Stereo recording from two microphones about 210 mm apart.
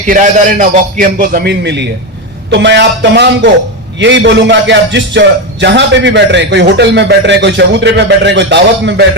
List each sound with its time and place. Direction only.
0.1 s a man's voice: 40° right (ahead or behind); by 9.0 s 55° right (ahead or behind)